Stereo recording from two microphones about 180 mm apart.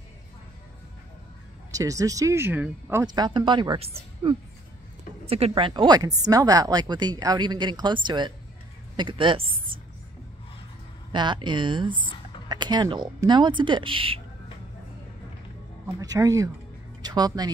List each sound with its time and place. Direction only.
1.7 s speech: 20° right (ahead or behind)
5.5 s speech: 25° right (ahead or behind)
11.1 s speech: 25° right (ahead or behind)
16.0 s speech: 20° right (ahead or behind)